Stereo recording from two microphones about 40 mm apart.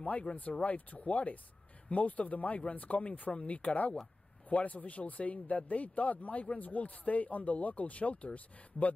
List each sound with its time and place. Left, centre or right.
0.4 s speech: left